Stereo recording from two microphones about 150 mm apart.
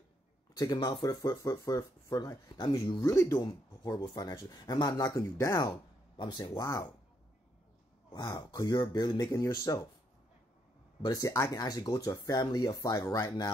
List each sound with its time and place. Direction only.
0.6 s speech: 25° left (ahead or behind)
8.1 s speech: 25° left (ahead or behind)
11.1 s speech: 25° left (ahead or behind)